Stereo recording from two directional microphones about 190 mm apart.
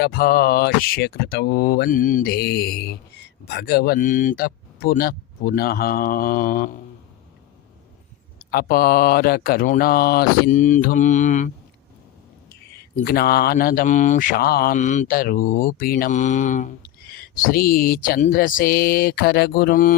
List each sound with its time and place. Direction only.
0.0 s speech: 55° left (ahead or behind)
3.4 s mantra: 60° left (ahead or behind)
8.4 s mantra: 55° left (ahead or behind)
13.1 s mantra: 55° left (ahead or behind)